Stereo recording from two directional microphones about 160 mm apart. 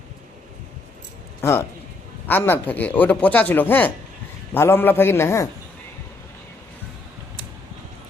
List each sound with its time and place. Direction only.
1.4 s speech: 15° left (ahead or behind)